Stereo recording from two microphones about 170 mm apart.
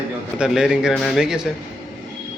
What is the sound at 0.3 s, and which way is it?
Speech, 5° right (ahead or behind).